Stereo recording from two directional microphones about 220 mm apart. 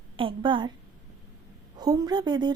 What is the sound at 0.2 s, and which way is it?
Speech, 25° right (ahead or behind).